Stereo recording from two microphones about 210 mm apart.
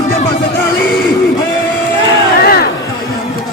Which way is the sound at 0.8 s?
45° left (ahead or behind).